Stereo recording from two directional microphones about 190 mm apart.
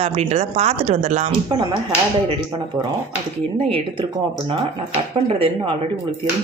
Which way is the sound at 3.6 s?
30° right (ahead or behind).